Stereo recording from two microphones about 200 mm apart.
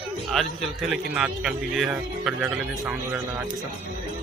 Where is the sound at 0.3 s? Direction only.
Centre (ahead or behind).